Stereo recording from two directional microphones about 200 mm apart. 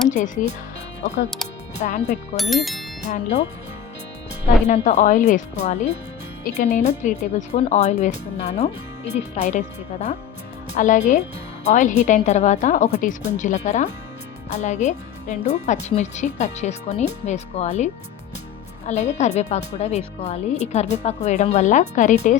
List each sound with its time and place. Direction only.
0.1 s speech: 35° left (ahead or behind)
1.8 s speech: 35° left (ahead or behind)
2.3 s speech: centre (ahead or behind)
3.1 s speech: 35° left (ahead or behind)
4.6 s speech: 35° left (ahead or behind)